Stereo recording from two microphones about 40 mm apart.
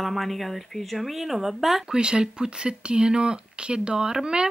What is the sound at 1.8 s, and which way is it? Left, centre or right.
Speech, right.